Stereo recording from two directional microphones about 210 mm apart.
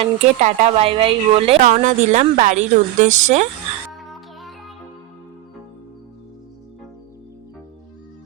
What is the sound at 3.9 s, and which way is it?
Music, centre (ahead or behind).